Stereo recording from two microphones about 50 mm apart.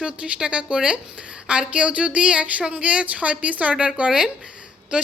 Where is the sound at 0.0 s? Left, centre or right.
Centre.